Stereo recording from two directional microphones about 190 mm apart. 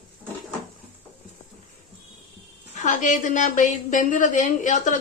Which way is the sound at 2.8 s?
40° left (ahead or behind).